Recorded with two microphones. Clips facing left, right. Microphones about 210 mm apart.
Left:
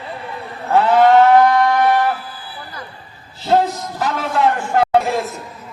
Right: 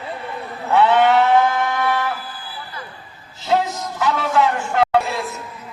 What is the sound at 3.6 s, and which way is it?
Music, 40° left (ahead or behind).